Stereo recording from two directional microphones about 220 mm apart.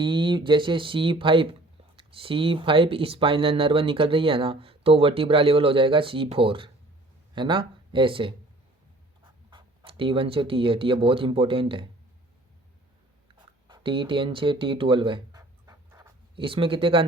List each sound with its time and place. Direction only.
0.0 s speech: 20° right (ahead or behind)
13.7 s speech: 20° right (ahead or behind)